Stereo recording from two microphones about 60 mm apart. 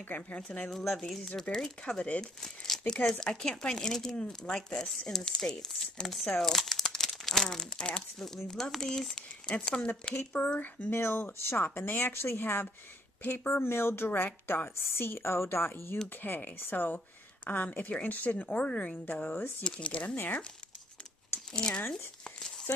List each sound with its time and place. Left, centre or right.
0.1 s speech: left
0.7 s speech: centre
2.4 s speech: centre
9.7 s speech: centre
10.1 s a woman's voice: left
10.9 s a woman's voice: left
16.2 s a woman's voice: left
21.5 s speech: centre
22.2 s a sound: centre